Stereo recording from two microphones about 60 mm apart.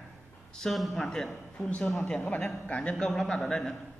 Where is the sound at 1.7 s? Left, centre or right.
Left; by 3.8 s centre.